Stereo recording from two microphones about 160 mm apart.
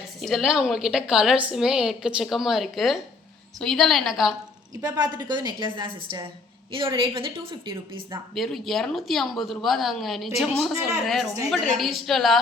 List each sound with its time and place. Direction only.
0.2 s a woman's voice: centre (ahead or behind)
4.7 s a woman's voice: 25° right (ahead or behind)
8.4 s a woman's voice: centre (ahead or behind)